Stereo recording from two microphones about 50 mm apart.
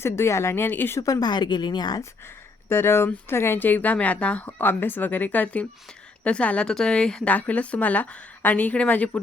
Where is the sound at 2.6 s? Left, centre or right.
Left.